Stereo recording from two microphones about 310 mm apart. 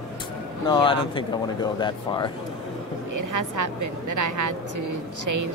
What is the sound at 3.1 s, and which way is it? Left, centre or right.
A woman's voice, right.